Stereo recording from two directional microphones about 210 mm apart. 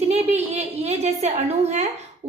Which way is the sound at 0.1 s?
30° right (ahead or behind).